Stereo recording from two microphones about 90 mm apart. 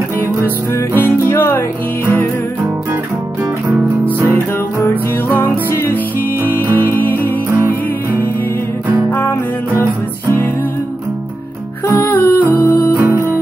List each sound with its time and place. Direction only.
0.9 s music: 25° left (ahead or behind)
3.6 s music: 20° right (ahead or behind)
4.8 s music: 25° left (ahead or behind)
7.4 s music: 30° right (ahead or behind)
9.1 s music: 25° left (ahead or behind)
11.9 s music: 20° left (ahead or behind)
12.9 s music: 25° right (ahead or behind)